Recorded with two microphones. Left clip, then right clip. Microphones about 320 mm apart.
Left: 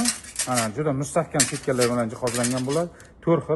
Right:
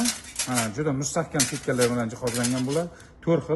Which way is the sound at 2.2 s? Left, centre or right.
Centre.